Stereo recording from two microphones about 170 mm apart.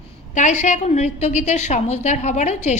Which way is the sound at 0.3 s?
45° left (ahead or behind).